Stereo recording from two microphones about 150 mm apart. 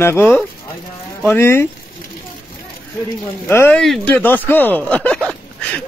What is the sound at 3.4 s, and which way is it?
Speech, 15° left (ahead or behind).